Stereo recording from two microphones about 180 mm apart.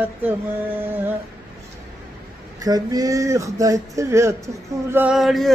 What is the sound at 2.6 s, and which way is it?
Speech, 20° right (ahead or behind).